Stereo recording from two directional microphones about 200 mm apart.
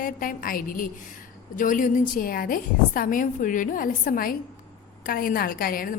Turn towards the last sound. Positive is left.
turn(degrees=45)  # may be behind; listen again after turning